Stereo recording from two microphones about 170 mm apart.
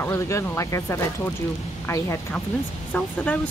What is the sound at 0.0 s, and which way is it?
Speech, 15° left (ahead or behind).